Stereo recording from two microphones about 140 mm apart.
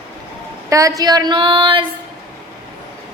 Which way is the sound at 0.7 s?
25° right (ahead or behind).